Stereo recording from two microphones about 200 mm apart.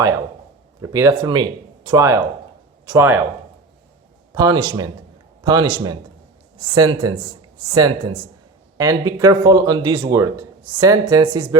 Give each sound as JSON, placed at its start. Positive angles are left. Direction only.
{"t": 0.8, "sound": "speech", "side_deg": -15}
{"t": 4.4, "sound": "a man's voice", "side_deg": -20}